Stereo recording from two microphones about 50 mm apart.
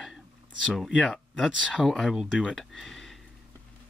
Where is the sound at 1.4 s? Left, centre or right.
Centre.